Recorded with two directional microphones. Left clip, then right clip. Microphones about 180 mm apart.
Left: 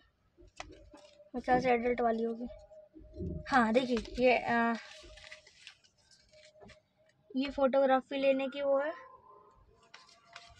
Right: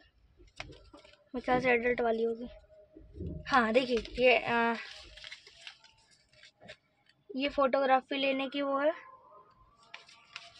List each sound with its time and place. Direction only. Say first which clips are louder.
1.3 s a woman's voice: right 1 dB; centre (ahead or behind)
3.4 s a woman's voice: right 1 dB; 5° left (ahead or behind)
7.3 s speech: even; 25° right (ahead or behind)